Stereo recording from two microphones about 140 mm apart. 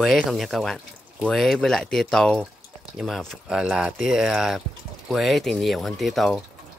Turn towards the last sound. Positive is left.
turn(degrees=0)  # may be behind; listen again after turning